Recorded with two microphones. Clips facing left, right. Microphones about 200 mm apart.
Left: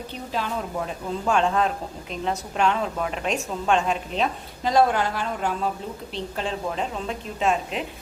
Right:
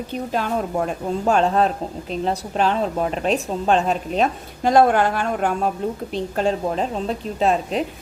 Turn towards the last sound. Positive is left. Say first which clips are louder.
# right 5 dB
turn(degrees=-35)  # may be behind; listen again after turning